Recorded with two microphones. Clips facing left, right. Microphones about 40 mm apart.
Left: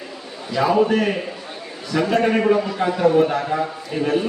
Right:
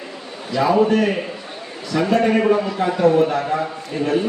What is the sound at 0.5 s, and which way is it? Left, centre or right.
Speech, centre.